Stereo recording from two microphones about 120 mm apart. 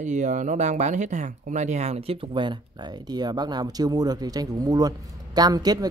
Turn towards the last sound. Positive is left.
turn(degrees=-35)  # may be behind; listen again after turning